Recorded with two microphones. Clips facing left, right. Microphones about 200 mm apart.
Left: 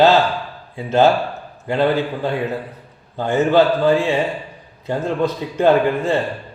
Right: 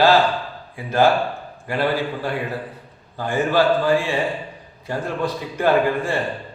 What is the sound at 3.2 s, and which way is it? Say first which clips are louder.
A man's voice: left 4 dB; 20° left (ahead or behind).